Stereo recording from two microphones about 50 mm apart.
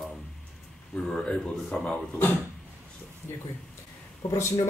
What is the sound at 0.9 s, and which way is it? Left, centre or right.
Speech, centre.